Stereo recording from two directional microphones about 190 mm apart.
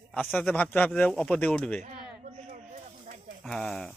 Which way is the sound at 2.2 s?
40° right (ahead or behind).